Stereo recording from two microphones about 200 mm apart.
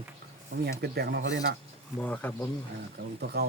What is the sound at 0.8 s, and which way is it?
Speech, 55° right (ahead or behind).